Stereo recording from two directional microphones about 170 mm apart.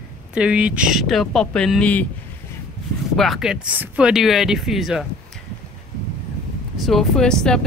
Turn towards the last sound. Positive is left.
turn(degrees=5)  # may be behind; listen again after turning